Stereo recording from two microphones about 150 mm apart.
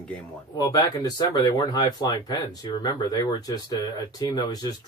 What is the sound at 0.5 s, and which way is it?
Speech, 25° left (ahead or behind).